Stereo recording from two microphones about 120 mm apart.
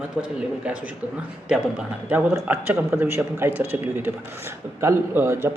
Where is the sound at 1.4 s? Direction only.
5° right (ahead or behind).